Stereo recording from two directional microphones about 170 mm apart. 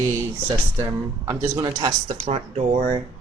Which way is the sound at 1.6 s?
25° right (ahead or behind).